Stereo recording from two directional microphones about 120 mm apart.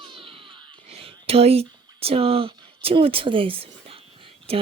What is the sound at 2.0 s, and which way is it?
Speech, 55° right (ahead or behind).